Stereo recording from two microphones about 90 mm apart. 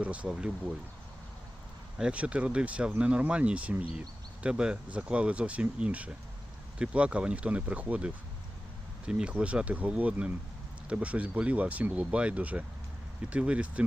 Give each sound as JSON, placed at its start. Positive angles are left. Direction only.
{"t": 0.0, "sound": "speech", "side_deg": -15}
{"t": 2.0, "sound": "speech", "side_deg": -10}